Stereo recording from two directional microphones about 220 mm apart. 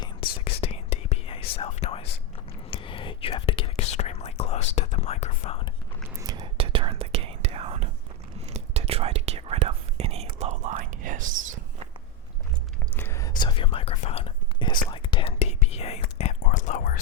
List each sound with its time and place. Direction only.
0.4 s whispering: 25° left (ahead or behind)
6.1 s whispering: 15° right (ahead or behind); by 11.9 s 35° right (ahead or behind)
13.0 s whispering: 10° left (ahead or behind); by 17.0 s 35° left (ahead or behind)